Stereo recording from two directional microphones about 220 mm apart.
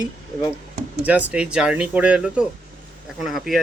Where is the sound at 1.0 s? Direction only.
5° right (ahead or behind).